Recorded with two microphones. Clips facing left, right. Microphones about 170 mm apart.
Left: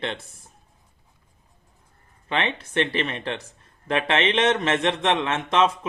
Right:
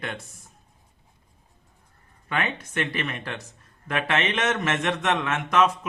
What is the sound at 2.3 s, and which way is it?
Speech, 25° left (ahead or behind).